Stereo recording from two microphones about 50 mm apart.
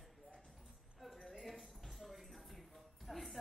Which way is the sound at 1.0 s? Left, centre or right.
Centre.